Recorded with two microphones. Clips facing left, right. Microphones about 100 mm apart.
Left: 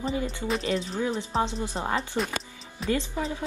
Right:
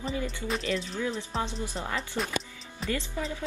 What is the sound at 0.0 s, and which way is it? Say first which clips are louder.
Speech: left 3 dB; 25° left (ahead or behind).